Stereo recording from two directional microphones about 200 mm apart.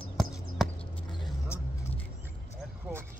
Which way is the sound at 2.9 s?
5° right (ahead or behind).